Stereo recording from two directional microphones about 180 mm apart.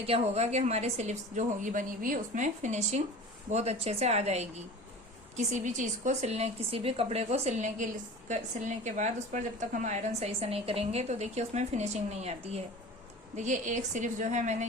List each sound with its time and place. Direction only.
0.1 s a woman's voice: 35° right (ahead or behind)